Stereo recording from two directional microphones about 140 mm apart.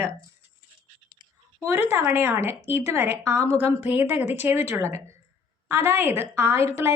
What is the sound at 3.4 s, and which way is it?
Speech, 50° left (ahead or behind).